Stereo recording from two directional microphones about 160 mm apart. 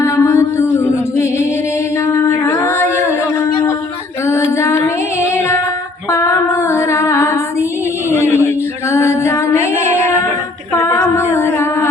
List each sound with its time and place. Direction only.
0.0 s music: 20° left (ahead or behind)
2.1 s a sound: 20° left (ahead or behind)
4.3 s female singing: 20° left (ahead or behind)
5.2 s child singing: 15° left (ahead or behind)
6.1 s female singing: 20° left (ahead or behind)
8.1 s a sound: 15° left (ahead or behind)
10.8 s a capella: 20° left (ahead or behind)